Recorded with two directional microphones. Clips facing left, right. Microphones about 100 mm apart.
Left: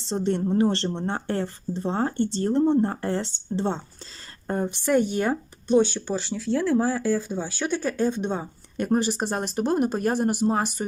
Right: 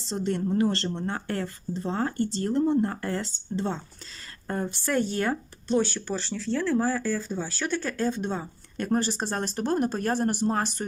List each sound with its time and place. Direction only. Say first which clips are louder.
0.0 s a woman's voice: left 3 dB; 25° left (ahead or behind)